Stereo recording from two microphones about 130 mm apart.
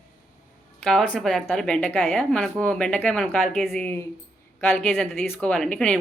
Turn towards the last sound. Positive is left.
turn(degrees=10)  # may be behind; listen again after turning